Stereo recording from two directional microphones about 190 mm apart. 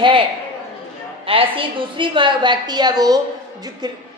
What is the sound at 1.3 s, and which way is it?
A woman's voice, 30° right (ahead or behind).